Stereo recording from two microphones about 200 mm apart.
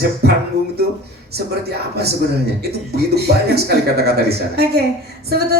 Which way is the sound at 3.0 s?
55° right (ahead or behind).